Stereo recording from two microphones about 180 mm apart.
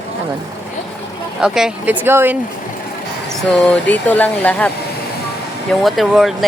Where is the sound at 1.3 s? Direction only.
5° right (ahead or behind).